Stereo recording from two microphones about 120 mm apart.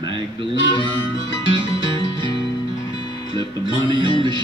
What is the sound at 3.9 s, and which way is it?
Music, 40° right (ahead or behind).